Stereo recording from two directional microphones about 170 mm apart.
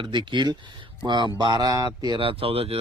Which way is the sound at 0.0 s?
25° right (ahead or behind).